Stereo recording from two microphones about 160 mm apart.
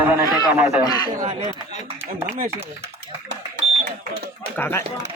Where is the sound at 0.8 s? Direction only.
25° left (ahead or behind).